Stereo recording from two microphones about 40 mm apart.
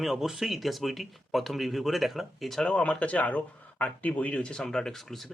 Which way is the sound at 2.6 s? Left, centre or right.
Left.